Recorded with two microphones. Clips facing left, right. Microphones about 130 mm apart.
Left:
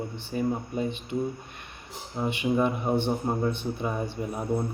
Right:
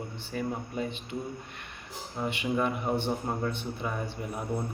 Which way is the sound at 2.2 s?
20° left (ahead or behind).